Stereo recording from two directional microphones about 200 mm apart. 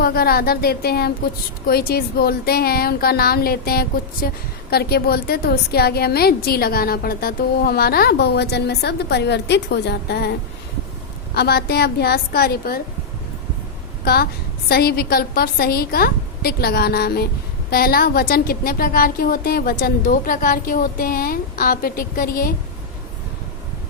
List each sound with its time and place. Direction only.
0.0 s a woman's voice: 50° left (ahead or behind)
11.3 s a woman's voice: 55° left (ahead or behind)
14.0 s a woman's voice: 50° left (ahead or behind)